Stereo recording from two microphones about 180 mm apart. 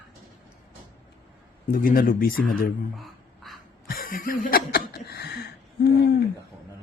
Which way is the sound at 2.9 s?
Centre (ahead or behind).